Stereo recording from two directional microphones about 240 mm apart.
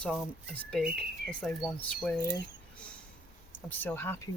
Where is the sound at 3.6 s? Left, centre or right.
Centre.